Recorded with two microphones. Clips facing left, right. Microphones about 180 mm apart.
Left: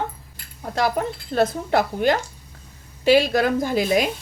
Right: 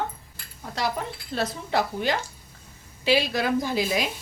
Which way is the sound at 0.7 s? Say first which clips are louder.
Left 6 dB; 50° left (ahead or behind).